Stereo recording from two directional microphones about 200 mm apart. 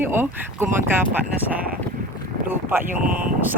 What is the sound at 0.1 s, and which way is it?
Speech, 10° right (ahead or behind).